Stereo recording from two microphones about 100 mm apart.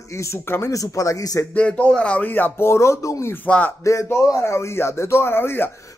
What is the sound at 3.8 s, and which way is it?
A man's voice, 30° left (ahead or behind).